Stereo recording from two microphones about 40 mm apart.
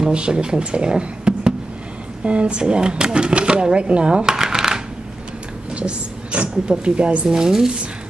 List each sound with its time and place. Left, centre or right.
0.0 s speech: right
4.3 s shuffling cards: centre
5.7 s speech: right
7.2 s speech: centre